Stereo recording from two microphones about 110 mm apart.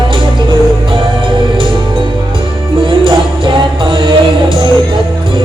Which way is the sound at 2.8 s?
50° right (ahead or behind).